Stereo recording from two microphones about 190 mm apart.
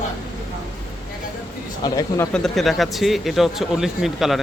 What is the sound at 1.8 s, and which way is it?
Speech, 20° left (ahead or behind).